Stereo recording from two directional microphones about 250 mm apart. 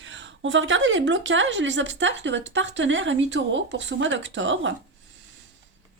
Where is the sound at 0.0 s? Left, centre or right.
Right.